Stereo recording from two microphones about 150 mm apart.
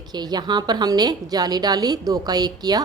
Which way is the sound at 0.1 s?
30° right (ahead or behind).